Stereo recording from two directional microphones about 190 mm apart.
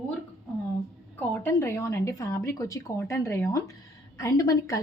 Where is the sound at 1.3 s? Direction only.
10° left (ahead or behind).